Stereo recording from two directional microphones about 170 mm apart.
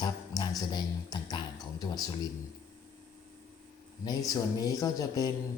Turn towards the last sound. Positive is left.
turn(degrees=20)  # may be behind; listen again after turning